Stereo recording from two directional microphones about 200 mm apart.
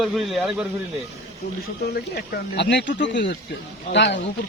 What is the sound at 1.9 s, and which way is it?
Speech, 55° left (ahead or behind).